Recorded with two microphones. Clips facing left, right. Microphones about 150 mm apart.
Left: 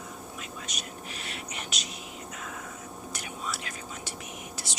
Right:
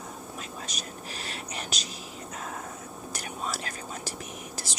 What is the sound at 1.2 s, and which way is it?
Whispering, 35° right (ahead or behind).